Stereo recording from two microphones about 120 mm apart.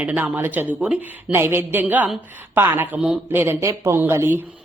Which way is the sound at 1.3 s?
20° right (ahead or behind).